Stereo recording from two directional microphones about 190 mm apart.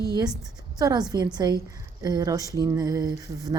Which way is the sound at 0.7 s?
20° right (ahead or behind).